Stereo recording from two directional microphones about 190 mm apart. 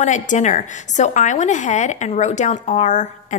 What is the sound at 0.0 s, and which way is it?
A woman's voice, 40° left (ahead or behind).